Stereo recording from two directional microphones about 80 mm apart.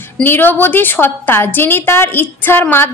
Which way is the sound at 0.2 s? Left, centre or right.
Left.